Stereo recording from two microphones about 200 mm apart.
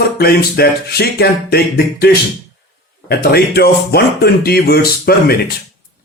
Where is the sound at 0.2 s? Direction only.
50° left (ahead or behind).